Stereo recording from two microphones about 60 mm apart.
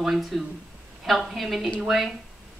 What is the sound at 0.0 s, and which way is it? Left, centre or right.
A woman's voice, centre.